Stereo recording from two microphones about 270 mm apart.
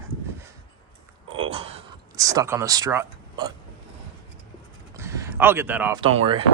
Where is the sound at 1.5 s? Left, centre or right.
Right.